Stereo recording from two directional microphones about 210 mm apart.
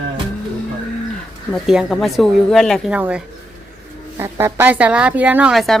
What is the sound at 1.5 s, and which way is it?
Speech, centre (ahead or behind).